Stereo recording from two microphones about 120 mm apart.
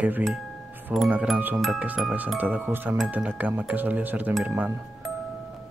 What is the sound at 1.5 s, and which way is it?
Speech, centre (ahead or behind).